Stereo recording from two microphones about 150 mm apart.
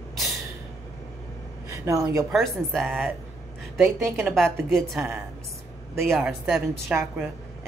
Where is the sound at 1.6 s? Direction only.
20° right (ahead or behind).